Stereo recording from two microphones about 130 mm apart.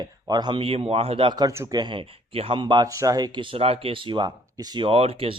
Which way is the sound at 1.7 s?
35° right (ahead or behind).